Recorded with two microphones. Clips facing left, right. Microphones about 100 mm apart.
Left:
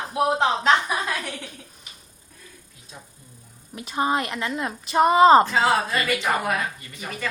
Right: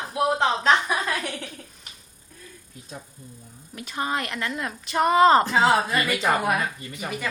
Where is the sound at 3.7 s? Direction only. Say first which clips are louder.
Left 4 dB; 20° left (ahead or behind).